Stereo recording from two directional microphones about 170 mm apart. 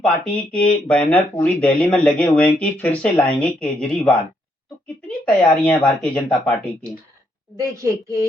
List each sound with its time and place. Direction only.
0.5 s speech: 5° left (ahead or behind)
7.5 s a woman's voice: 15° right (ahead or behind)